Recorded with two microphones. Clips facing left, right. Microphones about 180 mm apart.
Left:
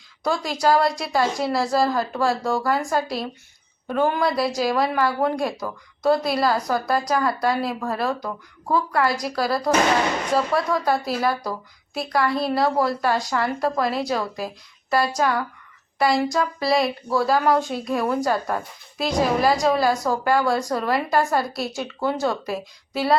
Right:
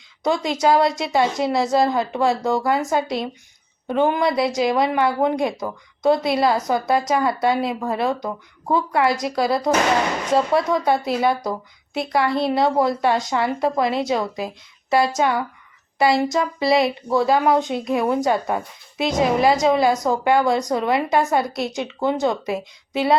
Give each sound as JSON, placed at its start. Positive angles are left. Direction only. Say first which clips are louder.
{"t": 0.3, "sound": "a woman's voice", "louder": "right 2 dB", "side_deg": -20}